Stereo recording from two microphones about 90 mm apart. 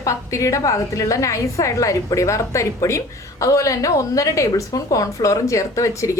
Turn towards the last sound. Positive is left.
turn(degrees=35)  # may be behind; listen again after turning